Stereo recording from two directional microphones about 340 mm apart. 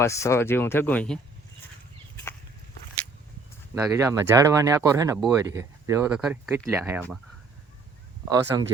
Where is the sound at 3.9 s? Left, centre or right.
Centre.